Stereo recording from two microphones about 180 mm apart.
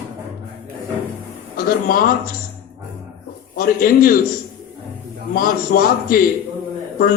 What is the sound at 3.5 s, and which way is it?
Speech, 50° left (ahead or behind).